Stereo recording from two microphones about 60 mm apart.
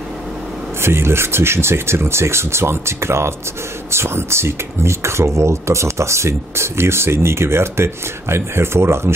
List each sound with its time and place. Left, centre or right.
0.8 s speech: right